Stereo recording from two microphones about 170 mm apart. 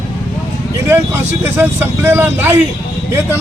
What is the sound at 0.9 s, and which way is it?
Speech, 15° right (ahead or behind).